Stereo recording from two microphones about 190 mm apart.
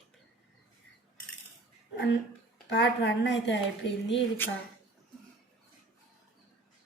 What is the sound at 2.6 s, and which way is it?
Speech, 60° left (ahead or behind).